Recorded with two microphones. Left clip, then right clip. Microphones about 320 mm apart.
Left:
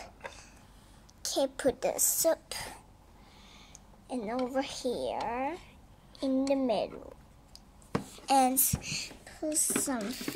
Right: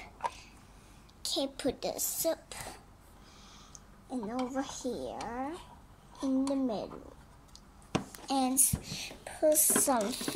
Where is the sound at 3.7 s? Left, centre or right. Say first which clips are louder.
Left 2 dB; left.